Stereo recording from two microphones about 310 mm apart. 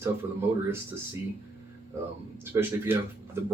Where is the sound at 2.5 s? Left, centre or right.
Centre.